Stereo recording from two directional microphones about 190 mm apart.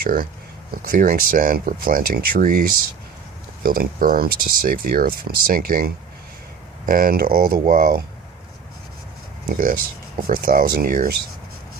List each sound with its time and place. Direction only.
0.0 s speech: 50° right (ahead or behind)
9.5 s speech: 45° right (ahead or behind)